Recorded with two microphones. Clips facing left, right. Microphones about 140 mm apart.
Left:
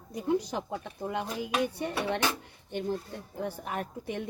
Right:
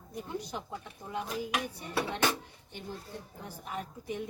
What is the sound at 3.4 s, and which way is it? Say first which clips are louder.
Dishes: left 6 dB; 70° left (ahead or behind).